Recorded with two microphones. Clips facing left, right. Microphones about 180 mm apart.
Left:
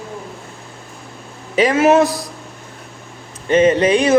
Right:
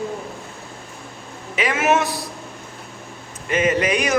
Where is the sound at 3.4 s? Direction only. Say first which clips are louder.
Left 7 dB; 30° left (ahead or behind).